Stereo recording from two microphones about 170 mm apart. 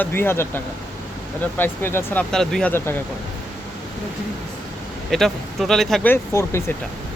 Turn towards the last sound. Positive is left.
turn(degrees=15)  # may be behind; listen again after turning